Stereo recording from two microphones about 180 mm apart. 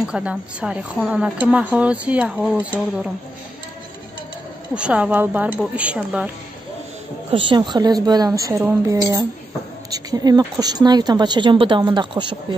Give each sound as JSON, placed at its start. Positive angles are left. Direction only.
{"t": 0.0, "sound": "speech", "side_deg": -5}
{"t": 4.7, "sound": "speech", "side_deg": -5}
{"t": 7.2, "sound": "speech", "side_deg": -30}